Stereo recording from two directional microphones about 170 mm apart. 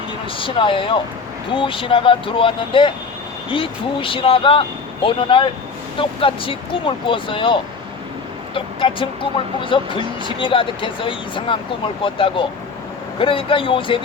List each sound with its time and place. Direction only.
0.3 s speech: 30° left (ahead or behind)